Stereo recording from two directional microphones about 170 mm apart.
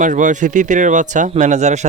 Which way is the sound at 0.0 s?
50° right (ahead or behind).